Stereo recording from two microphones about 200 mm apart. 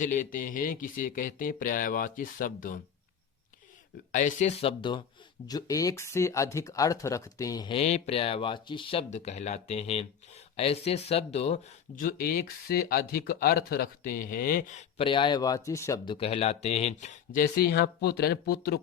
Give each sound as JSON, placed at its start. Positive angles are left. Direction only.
{"t": 0.0, "sound": "speech", "side_deg": 40}
{"t": 4.1, "sound": "speech", "side_deg": 40}
{"t": 12.0, "sound": "speech", "side_deg": 45}
{"t": 16.1, "sound": "speech", "side_deg": 30}